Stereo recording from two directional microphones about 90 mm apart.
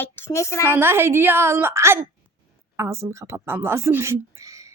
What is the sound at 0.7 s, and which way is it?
A woman's voice, 25° right (ahead or behind).